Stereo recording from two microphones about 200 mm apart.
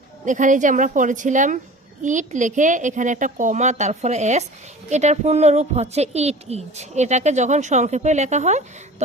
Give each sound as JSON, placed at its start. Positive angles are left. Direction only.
{"t": 0.3, "sound": "a woman's voice", "side_deg": -40}